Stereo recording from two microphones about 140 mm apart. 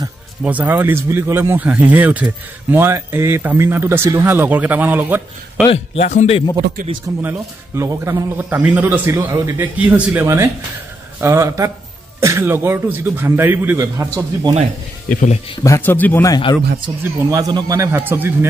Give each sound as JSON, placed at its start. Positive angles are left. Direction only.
{"t": 0.4, "sound": "speech", "side_deg": -10}
{"t": 5.7, "sound": "speech", "side_deg": 55}
{"t": 7.2, "sound": "speech", "side_deg": -15}
{"t": 9.8, "sound": "speech", "side_deg": -10}
{"t": 10.2, "sound": "speech", "side_deg": -20}
{"t": 15.0, "sound": "speech", "side_deg": 70}
{"t": 15.6, "sound": "a man's voice", "side_deg": 20}
{"t": 16.3, "sound": "speech", "side_deg": 35}
{"t": 16.8, "sound": "speech", "side_deg": -30}